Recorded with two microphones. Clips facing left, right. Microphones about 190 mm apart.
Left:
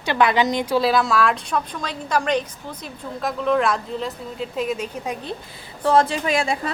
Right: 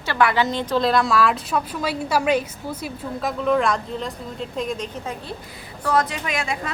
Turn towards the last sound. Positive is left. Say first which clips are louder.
# left 5 dB
turn(degrees=30)  # may be behind; listen again after turning